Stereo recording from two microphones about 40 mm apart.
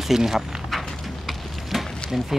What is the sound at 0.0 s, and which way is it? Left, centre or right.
Speech, centre.